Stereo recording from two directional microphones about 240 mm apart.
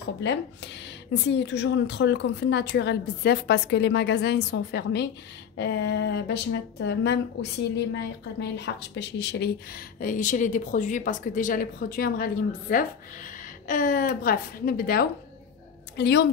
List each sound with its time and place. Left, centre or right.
0.2 s a woman's voice: left